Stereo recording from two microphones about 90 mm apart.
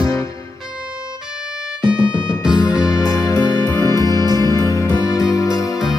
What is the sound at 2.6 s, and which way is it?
Music, 40° left (ahead or behind).